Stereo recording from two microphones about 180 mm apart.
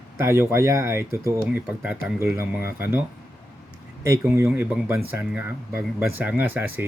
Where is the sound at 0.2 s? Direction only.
15° right (ahead or behind).